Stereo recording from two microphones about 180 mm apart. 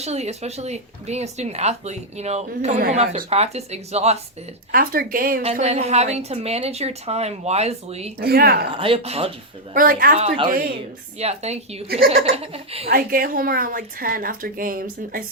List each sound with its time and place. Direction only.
0.0 s speech: 35° right (ahead or behind)
4.7 s a woman's voice: 55° right (ahead or behind)
5.4 s speech: 35° right (ahead or behind)
8.2 s a woman's voice: 60° right (ahead or behind)
8.7 s speech: 30° right (ahead or behind)
9.7 s a woman's voice: 50° right (ahead or behind)
10.2 s speech: 30° right (ahead or behind)
10.5 s a woman's voice: 55° right (ahead or behind)
11.2 s speech: 35° right (ahead or behind)
12.9 s a woman's voice: 55° right (ahead or behind)